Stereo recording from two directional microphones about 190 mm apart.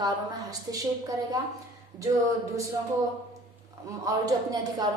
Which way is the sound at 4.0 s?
20° right (ahead or behind).